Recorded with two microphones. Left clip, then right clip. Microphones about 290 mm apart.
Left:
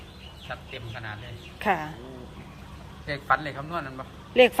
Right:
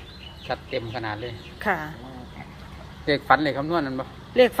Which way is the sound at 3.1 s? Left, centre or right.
Right.